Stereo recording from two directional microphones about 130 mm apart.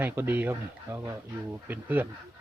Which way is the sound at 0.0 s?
15° right (ahead or behind).